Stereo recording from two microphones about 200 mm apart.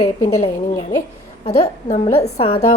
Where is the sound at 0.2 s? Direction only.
15° left (ahead or behind).